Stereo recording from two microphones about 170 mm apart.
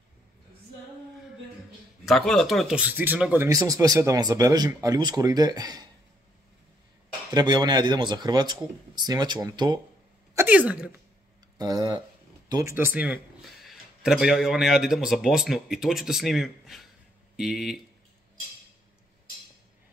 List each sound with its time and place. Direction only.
2.0 s speech: centre (ahead or behind)
3.4 s a man's voice: 20° right (ahead or behind)
7.3 s a man's voice: 25° right (ahead or behind)
10.3 s speech: 10° right (ahead or behind)
11.5 s speech: 25° right (ahead or behind); by 17.7 s centre (ahead or behind)